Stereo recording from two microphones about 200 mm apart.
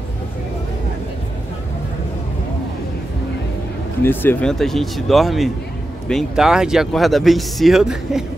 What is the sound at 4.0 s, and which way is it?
Speech, 10° left (ahead or behind).